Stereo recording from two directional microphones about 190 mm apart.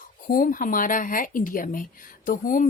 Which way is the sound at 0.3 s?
45° left (ahead or behind).